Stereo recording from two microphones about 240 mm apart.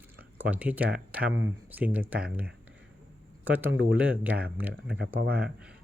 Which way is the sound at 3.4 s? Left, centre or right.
Centre.